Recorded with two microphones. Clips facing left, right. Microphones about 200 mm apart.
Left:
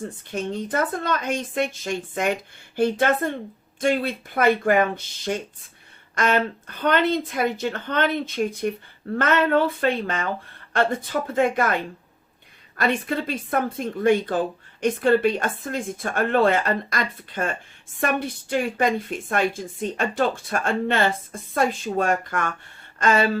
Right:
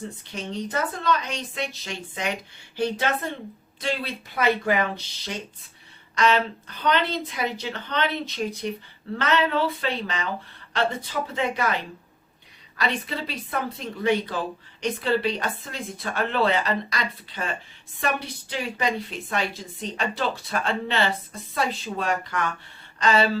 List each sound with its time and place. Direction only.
0.3 s speech: 50° left (ahead or behind)